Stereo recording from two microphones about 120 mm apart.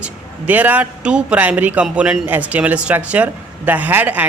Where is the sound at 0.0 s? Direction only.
15° right (ahead or behind).